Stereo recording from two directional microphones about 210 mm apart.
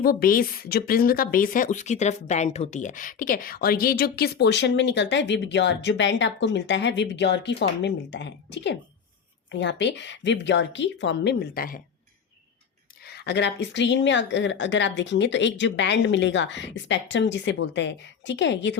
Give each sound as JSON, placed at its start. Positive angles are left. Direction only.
{"t": 0.0, "sound": "a woman's voice", "side_deg": 45}
{"t": 13.1, "sound": "speech", "side_deg": 50}